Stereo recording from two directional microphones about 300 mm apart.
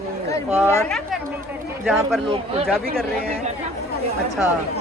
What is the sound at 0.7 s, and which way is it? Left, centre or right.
Speech, centre.